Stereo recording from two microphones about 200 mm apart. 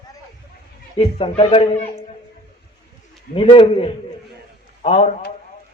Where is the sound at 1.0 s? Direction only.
25° left (ahead or behind).